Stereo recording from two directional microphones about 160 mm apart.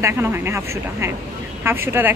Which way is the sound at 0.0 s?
15° right (ahead or behind).